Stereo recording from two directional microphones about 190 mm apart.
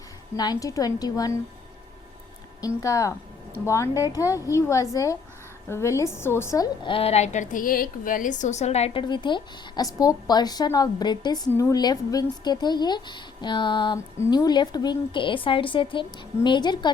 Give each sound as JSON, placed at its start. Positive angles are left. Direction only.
{"t": 0.3, "sound": "a woman's voice", "side_deg": 20}
{"t": 2.6, "sound": "speech", "side_deg": 15}
{"t": 6.8, "sound": "a woman's voice", "side_deg": 30}